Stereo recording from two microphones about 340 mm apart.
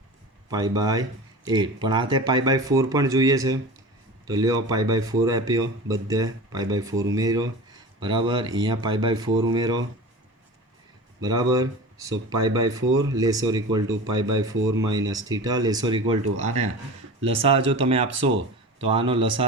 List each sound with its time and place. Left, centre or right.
0.5 s speech: centre
11.2 s speech: centre
16.2 s speech: right
17.2 s speech: centre